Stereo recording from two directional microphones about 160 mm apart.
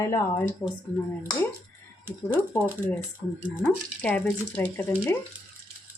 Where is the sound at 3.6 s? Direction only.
10° left (ahead or behind).